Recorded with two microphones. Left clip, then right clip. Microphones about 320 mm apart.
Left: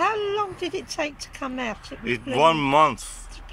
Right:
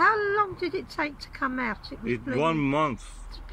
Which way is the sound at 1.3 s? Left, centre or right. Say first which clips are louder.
Right 2 dB; centre.